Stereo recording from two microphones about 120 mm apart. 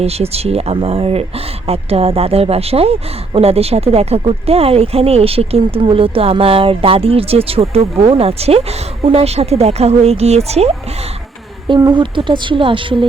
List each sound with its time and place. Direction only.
0.0 s speech: 60° right (ahead or behind)
11.8 s speech: 40° right (ahead or behind)